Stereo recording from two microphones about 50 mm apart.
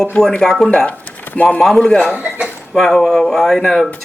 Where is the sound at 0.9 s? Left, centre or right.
Left.